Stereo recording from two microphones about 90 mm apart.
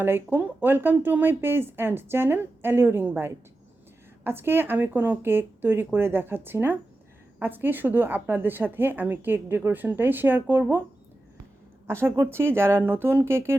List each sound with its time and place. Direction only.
0.0 s a woman's voice: 25° right (ahead or behind)
11.9 s a woman's voice: 30° right (ahead or behind)